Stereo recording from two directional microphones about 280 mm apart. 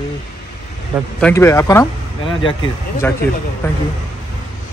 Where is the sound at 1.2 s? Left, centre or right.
Centre.